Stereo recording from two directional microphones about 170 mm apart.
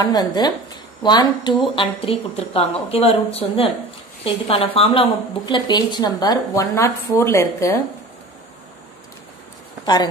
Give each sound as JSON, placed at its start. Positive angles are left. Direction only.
{"t": 0.0, "sound": "a woman's voice", "side_deg": 25}